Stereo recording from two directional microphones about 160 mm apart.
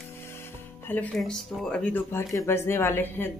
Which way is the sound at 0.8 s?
10° left (ahead or behind).